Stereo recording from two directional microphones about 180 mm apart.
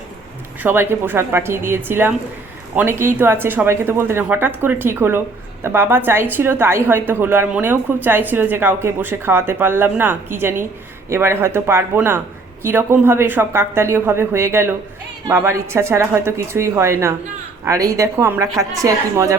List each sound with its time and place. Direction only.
0.6 s a woman's voice: 10° right (ahead or behind)